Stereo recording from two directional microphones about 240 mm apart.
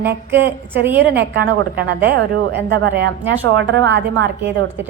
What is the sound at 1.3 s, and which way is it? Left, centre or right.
A woman's voice, right.